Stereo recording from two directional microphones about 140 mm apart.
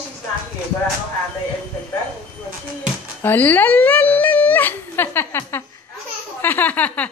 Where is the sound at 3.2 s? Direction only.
15° left (ahead or behind).